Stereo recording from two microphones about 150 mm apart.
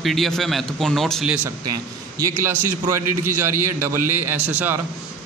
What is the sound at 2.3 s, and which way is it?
A man's voice, 15° right (ahead or behind).